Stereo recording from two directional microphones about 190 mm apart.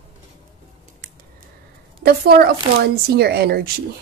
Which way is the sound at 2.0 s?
55° right (ahead or behind).